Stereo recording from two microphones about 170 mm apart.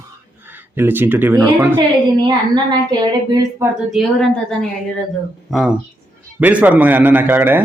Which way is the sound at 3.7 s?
Centre (ahead or behind).